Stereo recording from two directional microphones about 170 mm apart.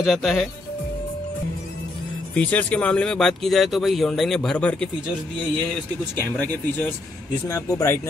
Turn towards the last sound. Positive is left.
turn(degrees=20)  # may be behind; listen again after turning